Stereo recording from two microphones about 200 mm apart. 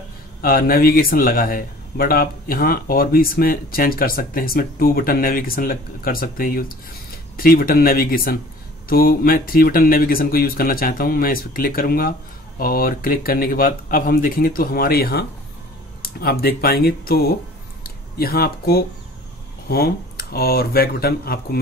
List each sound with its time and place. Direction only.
0.4 s speech: 50° left (ahead or behind)